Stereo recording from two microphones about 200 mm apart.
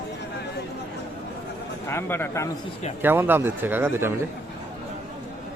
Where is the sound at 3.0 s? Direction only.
10° right (ahead or behind).